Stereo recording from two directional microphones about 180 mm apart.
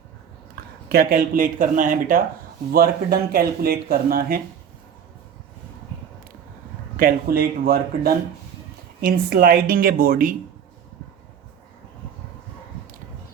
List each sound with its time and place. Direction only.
0.5 s speech: 60° right (ahead or behind)
6.9 s a woman's voice: 55° right (ahead or behind)